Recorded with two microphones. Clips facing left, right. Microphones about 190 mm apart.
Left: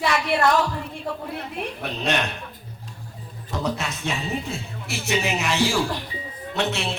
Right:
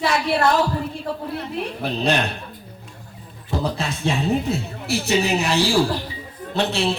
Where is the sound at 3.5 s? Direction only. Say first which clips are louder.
Right 3 dB; 30° right (ahead or behind).